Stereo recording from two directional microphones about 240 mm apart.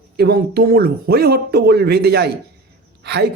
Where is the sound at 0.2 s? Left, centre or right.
Right.